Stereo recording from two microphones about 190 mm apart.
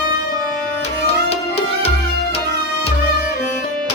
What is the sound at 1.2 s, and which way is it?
Music, 30° left (ahead or behind).